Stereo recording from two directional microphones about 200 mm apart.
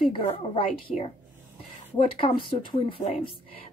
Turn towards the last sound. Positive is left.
turn(degrees=25)  # may be behind; listen again after turning